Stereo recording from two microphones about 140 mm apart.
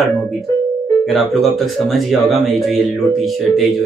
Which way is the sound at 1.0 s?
Centre (ahead or behind).